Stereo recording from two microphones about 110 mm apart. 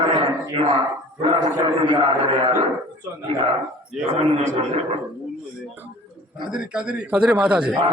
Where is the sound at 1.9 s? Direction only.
55° right (ahead or behind).